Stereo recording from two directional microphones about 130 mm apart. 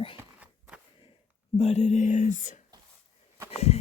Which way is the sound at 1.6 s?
60° left (ahead or behind).